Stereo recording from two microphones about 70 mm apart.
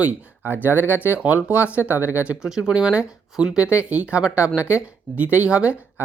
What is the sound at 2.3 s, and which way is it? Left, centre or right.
Speech, centre.